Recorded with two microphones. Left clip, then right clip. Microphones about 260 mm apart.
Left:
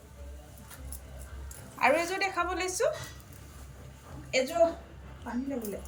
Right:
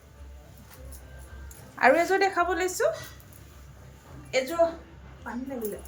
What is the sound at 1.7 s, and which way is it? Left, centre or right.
Speech, centre.